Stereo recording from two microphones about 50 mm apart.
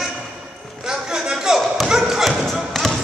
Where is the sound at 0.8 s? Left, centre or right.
Centre.